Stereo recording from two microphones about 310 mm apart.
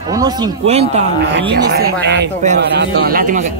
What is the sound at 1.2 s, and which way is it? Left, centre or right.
Speech, right.